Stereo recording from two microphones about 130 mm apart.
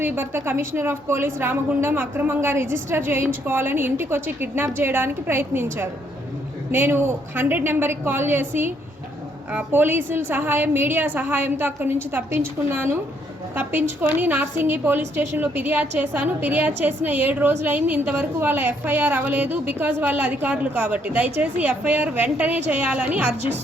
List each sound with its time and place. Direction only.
0.0 s a woman's voice: 15° right (ahead or behind)